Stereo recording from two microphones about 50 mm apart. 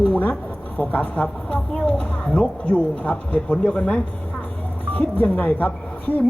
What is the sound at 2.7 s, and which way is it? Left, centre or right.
Speech, left.